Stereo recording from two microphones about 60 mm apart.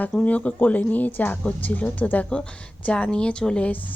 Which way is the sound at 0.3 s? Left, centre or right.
Left.